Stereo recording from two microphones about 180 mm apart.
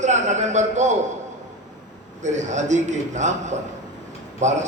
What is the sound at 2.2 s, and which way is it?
A man's voice, 40° right (ahead or behind).